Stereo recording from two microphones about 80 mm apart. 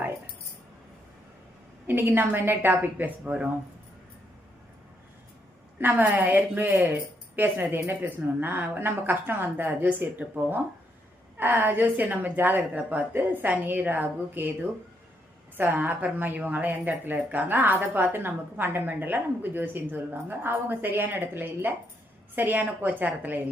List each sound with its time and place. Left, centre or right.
1.9 s a woman's voice: right
5.8 s a woman's voice: right
15.5 s a woman's voice: right